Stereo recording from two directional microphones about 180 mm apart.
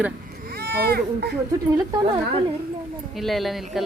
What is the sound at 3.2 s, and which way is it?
Speech, centre (ahead or behind).